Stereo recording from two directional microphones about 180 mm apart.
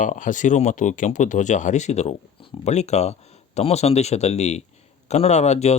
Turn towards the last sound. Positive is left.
turn(degrees=40)  # may be behind; listen again after turning